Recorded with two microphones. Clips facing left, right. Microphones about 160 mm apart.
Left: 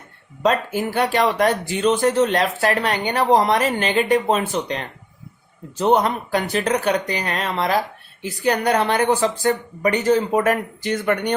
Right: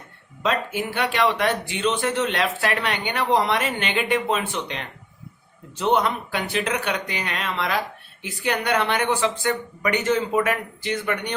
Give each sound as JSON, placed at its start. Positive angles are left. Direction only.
{"t": 0.4, "sound": "speech", "side_deg": 40}